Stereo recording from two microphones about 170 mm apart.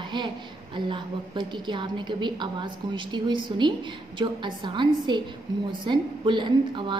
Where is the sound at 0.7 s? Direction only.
30° right (ahead or behind).